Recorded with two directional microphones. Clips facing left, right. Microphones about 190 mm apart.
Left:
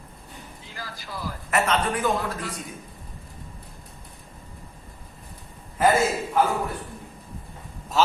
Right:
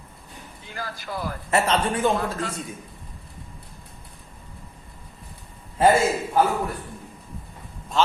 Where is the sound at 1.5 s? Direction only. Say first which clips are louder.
Right 1 dB; 30° right (ahead or behind).